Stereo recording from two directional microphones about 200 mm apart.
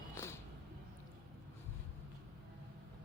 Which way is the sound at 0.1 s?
15° left (ahead or behind).